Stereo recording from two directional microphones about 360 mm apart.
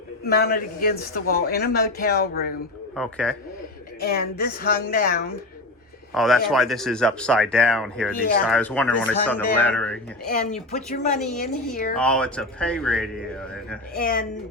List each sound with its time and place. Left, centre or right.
0.3 s speech: left
2.9 s speech: centre
4.0 s speech: left
6.1 s speech: centre
10.2 s speech: left
11.9 s speech: centre
13.9 s speech: left